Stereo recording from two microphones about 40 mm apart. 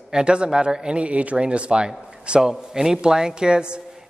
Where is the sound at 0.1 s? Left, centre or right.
Right.